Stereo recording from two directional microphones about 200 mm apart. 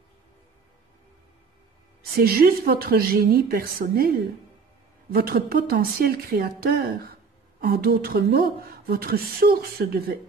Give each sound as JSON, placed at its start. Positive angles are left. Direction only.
{"t": 2.1, "sound": "speech", "side_deg": -50}